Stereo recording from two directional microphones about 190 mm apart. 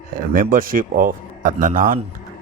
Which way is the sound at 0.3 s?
50° right (ahead or behind).